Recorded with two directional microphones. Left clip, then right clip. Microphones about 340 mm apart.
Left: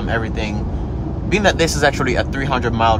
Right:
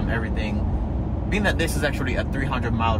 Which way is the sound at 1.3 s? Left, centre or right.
Centre.